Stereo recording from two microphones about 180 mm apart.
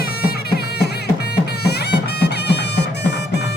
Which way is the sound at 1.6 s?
65° left (ahead or behind).